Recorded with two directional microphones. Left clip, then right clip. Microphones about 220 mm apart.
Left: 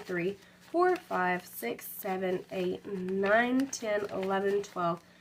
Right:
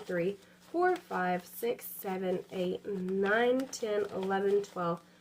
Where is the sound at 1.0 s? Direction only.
30° left (ahead or behind).